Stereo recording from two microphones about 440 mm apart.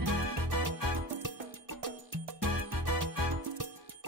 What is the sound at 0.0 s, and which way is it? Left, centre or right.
Music, right.